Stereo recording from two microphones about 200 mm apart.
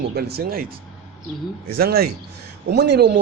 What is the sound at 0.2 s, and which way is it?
Speech, 50° right (ahead or behind).